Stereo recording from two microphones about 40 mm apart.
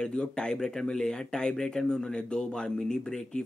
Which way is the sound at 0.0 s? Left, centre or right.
Left.